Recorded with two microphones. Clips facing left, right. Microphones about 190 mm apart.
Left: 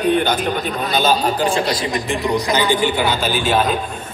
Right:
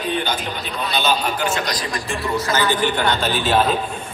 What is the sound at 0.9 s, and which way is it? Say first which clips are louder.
Speech: left 4 dB; 45° left (ahead or behind).